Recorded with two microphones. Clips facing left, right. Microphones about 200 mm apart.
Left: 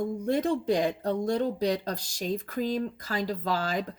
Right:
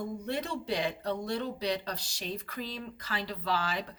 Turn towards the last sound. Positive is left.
turn(degrees=45)  # may be behind; listen again after turning